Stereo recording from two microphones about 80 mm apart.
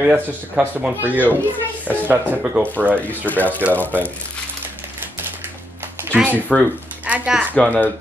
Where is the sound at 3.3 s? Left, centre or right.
Left.